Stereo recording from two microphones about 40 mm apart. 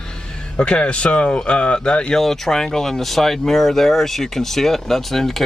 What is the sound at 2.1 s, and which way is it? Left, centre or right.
Speech, centre.